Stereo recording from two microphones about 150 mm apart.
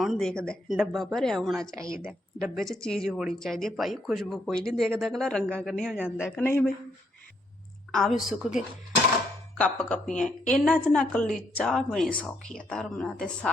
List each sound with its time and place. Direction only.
0.0 s a woman's voice: centre (ahead or behind)
1.7 s a woman's voice: 20° right (ahead or behind)
2.6 s a woman's voice: centre (ahead or behind)
6.3 s a woman's voice: 15° left (ahead or behind)
7.9 s a woman's voice: centre (ahead or behind)
9.6 s a woman's voice: 10° left (ahead or behind)